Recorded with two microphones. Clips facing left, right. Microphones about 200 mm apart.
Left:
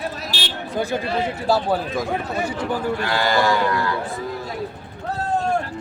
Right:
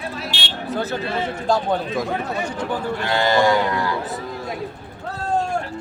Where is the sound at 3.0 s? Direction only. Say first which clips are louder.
Right 5 dB; 25° right (ahead or behind).